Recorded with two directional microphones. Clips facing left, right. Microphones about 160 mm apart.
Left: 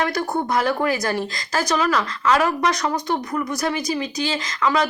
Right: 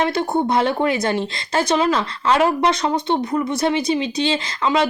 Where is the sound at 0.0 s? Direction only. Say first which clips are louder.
Right 3 dB; 25° right (ahead or behind).